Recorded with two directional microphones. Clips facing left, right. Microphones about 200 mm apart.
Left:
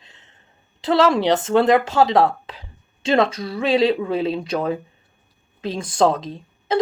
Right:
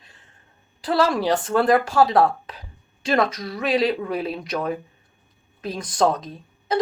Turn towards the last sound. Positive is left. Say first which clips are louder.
# left 3 dB
turn(degrees=25)  # may be behind; listen again after turning